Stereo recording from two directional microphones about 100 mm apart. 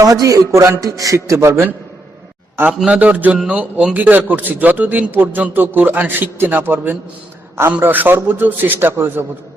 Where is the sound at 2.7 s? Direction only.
10° right (ahead or behind).